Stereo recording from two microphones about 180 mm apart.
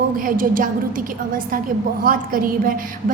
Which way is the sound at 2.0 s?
50° right (ahead or behind).